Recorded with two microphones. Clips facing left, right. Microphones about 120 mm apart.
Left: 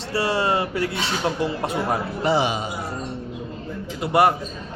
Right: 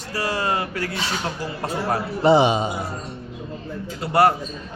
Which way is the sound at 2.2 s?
25° right (ahead or behind).